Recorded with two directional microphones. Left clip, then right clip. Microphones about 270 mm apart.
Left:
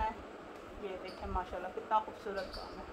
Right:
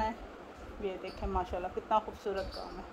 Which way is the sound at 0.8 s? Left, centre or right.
Right.